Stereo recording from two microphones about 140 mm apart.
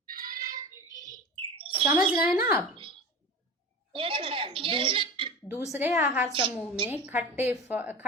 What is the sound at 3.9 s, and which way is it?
Speech, 40° right (ahead or behind).